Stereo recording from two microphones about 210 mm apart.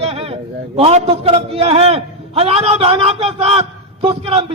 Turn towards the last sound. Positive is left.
turn(degrees=-30)  # may be behind; listen again after turning